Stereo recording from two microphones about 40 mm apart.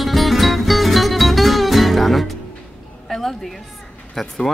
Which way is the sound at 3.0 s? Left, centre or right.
Centre.